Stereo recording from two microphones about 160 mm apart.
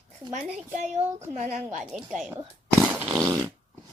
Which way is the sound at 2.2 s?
15° right (ahead or behind).